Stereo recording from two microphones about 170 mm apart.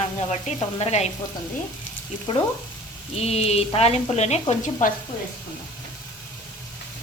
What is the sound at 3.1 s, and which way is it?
A woman's voice, 35° left (ahead or behind).